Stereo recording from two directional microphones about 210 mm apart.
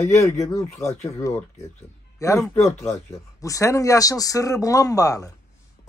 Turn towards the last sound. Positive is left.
turn(degrees=15)  # may be behind; listen again after turning